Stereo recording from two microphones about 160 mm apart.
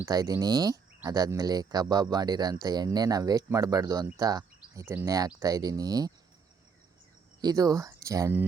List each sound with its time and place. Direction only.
0.0 s speech: 25° right (ahead or behind)
7.4 s speech: 20° right (ahead or behind)